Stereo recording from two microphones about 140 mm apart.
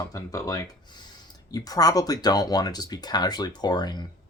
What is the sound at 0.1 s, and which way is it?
Speech, 25° left (ahead or behind).